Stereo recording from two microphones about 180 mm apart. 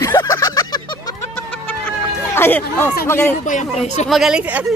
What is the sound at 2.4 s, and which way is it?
Speech, 10° left (ahead or behind).